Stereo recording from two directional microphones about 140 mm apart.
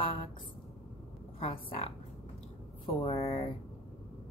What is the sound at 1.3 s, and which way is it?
Speech, 40° left (ahead or behind).